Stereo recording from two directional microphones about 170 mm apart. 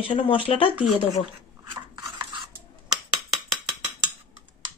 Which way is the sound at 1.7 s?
25° right (ahead or behind).